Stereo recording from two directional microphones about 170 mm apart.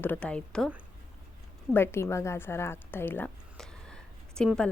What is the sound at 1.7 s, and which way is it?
A woman's voice, 15° left (ahead or behind).